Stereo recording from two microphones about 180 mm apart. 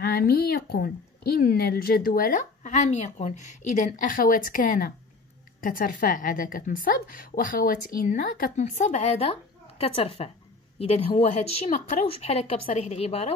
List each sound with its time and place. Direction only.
0.0 s a woman's voice: 55° left (ahead or behind); by 13.3 s 35° left (ahead or behind)